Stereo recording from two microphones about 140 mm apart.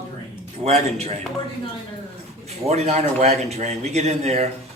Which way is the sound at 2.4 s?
50° right (ahead or behind).